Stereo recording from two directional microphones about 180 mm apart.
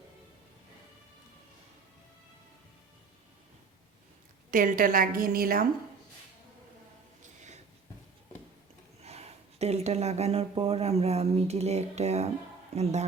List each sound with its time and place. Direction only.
4.5 s a woman's voice: 50° right (ahead or behind)
9.0 s speech: 35° right (ahead or behind)